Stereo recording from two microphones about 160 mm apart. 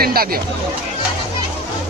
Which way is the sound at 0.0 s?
70° right (ahead or behind).